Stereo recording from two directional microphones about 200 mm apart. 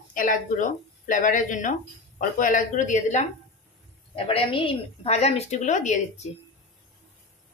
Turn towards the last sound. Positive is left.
turn(degrees=40)  # may be behind; listen again after turning